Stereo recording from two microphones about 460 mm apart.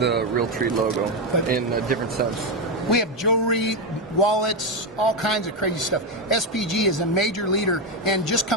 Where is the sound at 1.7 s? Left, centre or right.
Centre.